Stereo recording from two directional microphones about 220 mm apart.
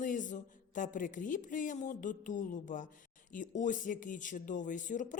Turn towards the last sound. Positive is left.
turn(degrees=35)  # may be behind; listen again after turning